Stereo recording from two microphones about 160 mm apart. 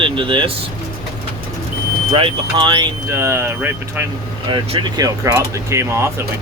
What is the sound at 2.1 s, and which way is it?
Speech, 30° right (ahead or behind).